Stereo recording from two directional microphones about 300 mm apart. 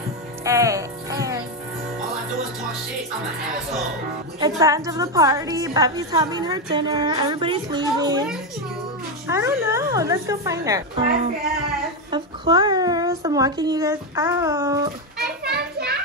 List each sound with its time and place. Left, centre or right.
0.4 s music: centre
4.4 s a woman's voice: centre
9.3 s a woman's voice: centre
12.1 s a woman's voice: centre
15.1 s children playing: right